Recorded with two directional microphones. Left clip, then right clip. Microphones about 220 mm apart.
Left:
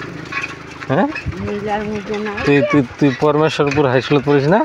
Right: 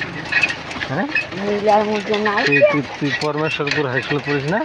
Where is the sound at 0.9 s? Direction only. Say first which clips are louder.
Left 8 dB; 55° left (ahead or behind).